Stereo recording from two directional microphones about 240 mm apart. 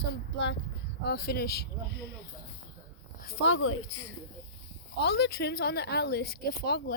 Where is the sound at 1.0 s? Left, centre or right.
Left.